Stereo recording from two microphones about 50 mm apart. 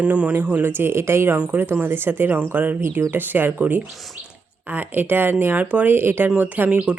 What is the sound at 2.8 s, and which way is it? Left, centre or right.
Speech, right.